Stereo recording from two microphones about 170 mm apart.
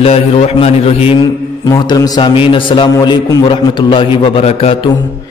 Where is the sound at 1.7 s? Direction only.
20° left (ahead or behind).